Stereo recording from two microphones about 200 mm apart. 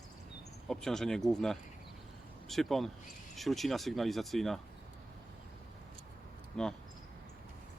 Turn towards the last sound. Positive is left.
turn(degrees=5)  # may be behind; listen again after turning